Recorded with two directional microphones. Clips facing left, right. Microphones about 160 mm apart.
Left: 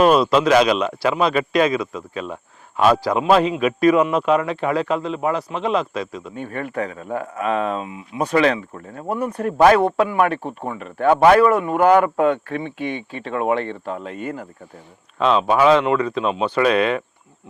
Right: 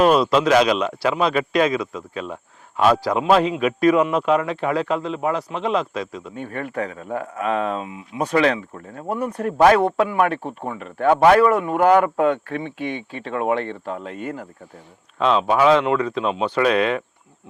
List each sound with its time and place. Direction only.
0.0 s speech: 10° left (ahead or behind)
2.8 s speech: 10° left (ahead or behind)
9.6 s speech: 10° left (ahead or behind)
10.4 s speech: 30° left (ahead or behind)
10.8 s speech: 15° left (ahead or behind)